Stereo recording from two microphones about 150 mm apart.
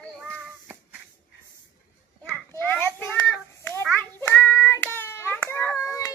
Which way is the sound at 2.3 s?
10° left (ahead or behind).